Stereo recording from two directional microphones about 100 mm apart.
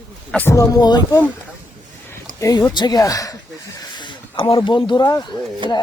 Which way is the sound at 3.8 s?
50° left (ahead or behind).